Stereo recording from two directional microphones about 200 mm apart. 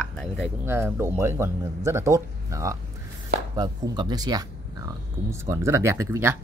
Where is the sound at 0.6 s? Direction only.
10° right (ahead or behind).